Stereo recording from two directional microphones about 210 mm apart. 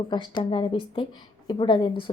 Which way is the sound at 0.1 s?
20° left (ahead or behind).